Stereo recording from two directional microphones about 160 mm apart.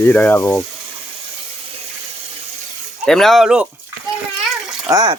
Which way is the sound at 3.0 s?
Centre (ahead or behind).